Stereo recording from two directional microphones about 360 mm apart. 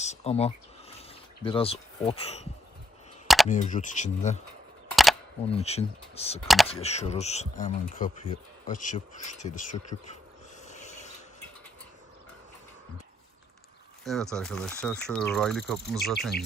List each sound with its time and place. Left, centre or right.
0.0 s speech: centre
3.2 s camera: centre
3.5 s speech: centre
4.9 s single-lens reflex camera: centre
5.5 s speech: centre
10.7 s rub: centre
14.0 s speech: centre